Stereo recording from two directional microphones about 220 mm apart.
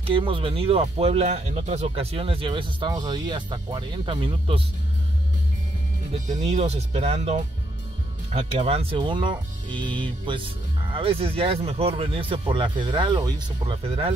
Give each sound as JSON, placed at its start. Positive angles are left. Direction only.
{"t": 0.0, "sound": "speech", "side_deg": -25}
{"t": 6.4, "sound": "speech", "side_deg": -30}